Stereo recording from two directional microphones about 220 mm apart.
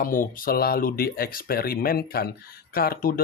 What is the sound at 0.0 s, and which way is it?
Speech, 40° left (ahead or behind).